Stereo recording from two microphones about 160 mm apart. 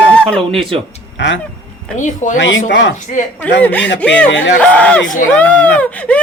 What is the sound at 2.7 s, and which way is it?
Speech, 90° left.